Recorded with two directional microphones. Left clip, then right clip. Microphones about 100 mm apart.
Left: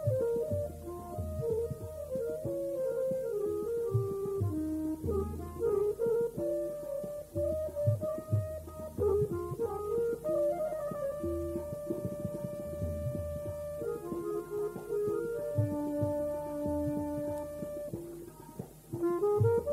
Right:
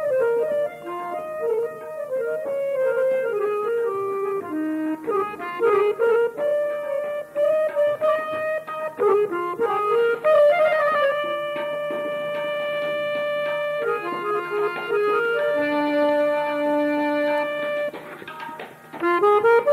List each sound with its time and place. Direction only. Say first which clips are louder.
2.8 s music: right 13 dB; 30° left (ahead or behind)
7.7 s music: right 15 dB; 25° left (ahead or behind)
13.5 s music: right 14 dB; 25° left (ahead or behind)
19.0 s music: right 13 dB; 30° left (ahead or behind)